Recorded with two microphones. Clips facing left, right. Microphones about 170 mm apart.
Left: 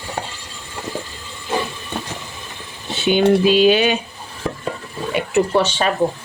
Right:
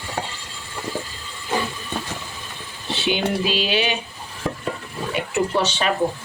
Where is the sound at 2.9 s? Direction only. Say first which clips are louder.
Left 8 dB; 50° left (ahead or behind).